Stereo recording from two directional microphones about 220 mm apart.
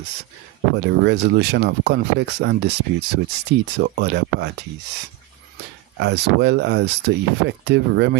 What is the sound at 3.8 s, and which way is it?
Speech, 50° right (ahead or behind).